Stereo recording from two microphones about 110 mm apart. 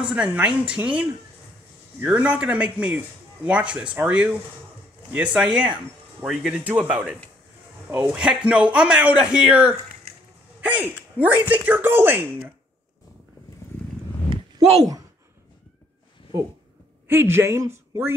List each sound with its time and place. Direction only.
0.0 s a man's voice: 10° right (ahead or behind)
17.1 s speech: 20° right (ahead or behind)